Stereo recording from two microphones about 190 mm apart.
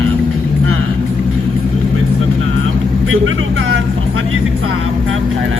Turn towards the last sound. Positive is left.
turn(degrees=-90)